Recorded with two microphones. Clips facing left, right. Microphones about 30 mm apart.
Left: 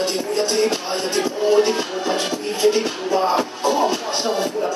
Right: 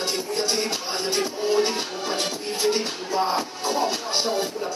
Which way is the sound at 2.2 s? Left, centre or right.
Left.